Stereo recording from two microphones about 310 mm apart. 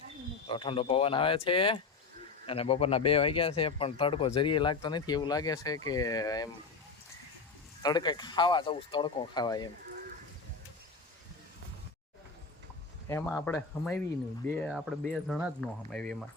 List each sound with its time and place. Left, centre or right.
0.4 s speech: centre
7.8 s speech: centre
13.1 s speech: centre